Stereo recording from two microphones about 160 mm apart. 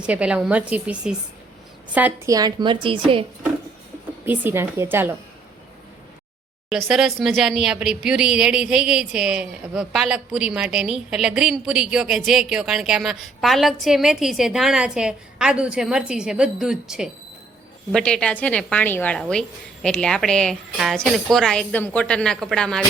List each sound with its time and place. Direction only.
0.0 s a woman's voice: 5° right (ahead or behind)
2.3 s a woman's voice: 25° right (ahead or behind)
4.3 s a woman's voice: 15° right (ahead or behind)
6.7 s a woman's voice: centre (ahead or behind)